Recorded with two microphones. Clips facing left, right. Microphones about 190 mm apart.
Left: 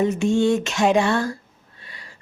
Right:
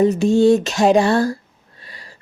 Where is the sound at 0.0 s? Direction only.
35° right (ahead or behind).